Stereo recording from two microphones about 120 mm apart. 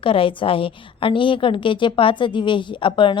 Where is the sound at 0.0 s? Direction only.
50° left (ahead or behind).